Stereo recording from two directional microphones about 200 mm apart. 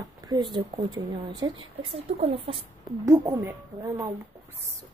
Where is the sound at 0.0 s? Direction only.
20° right (ahead or behind).